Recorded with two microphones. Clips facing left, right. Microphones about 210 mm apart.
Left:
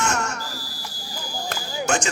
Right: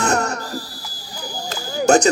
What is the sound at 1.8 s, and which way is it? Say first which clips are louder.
Smoke detector: right 11 dB; 40° right (ahead or behind).